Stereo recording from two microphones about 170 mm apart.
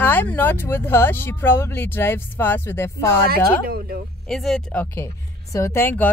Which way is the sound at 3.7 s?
65° right (ahead or behind).